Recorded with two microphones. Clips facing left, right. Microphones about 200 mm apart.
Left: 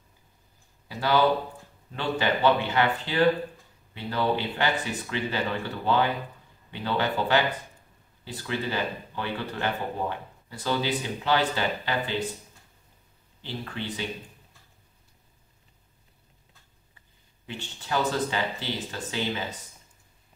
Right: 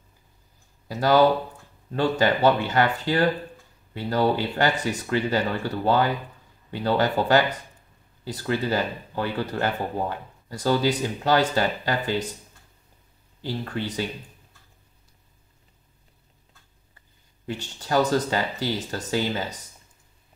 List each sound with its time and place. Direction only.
0.8 s speech: 45° right (ahead or behind)
13.4 s speech: 40° right (ahead or behind)
17.5 s speech: 40° right (ahead or behind)